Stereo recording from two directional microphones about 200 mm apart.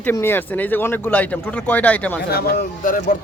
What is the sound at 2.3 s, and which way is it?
Speech, 50° left (ahead or behind).